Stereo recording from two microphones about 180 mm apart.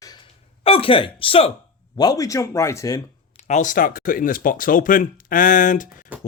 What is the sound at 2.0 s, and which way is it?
Speech, 20° left (ahead or behind).